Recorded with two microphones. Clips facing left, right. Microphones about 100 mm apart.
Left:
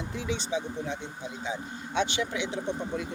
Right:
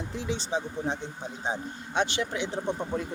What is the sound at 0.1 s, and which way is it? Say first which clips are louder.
Speech: right 1 dB; 35° right (ahead or behind).